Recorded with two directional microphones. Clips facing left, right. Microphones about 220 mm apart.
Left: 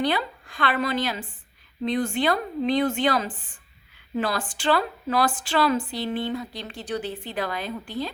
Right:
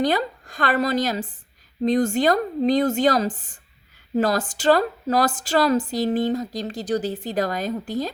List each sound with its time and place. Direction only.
0.0 s a woman's voice: 40° right (ahead or behind)